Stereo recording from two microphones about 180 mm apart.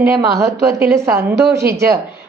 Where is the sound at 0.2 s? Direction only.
20° right (ahead or behind).